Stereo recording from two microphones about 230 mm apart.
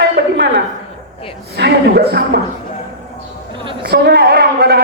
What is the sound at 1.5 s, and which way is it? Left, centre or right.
Speech, right.